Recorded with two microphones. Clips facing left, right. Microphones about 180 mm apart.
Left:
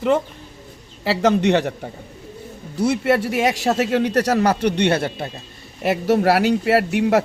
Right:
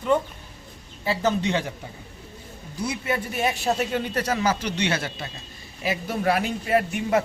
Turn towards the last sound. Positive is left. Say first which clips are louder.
# left 5 dB
turn(degrees=75)  # may be behind; listen again after turning